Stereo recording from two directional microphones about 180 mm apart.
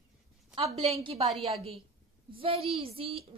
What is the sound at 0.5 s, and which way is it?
Speech, 35° right (ahead or behind).